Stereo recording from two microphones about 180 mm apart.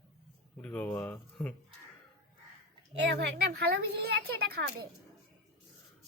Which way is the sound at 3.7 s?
60° right (ahead or behind).